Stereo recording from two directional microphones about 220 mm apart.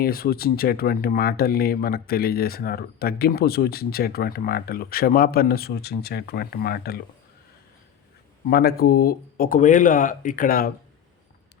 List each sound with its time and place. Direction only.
0.0 s speech: 45° left (ahead or behind)
8.4 s speech: 45° left (ahead or behind)